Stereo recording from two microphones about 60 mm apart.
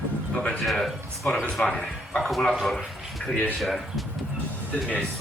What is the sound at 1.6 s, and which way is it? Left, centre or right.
Speech, centre.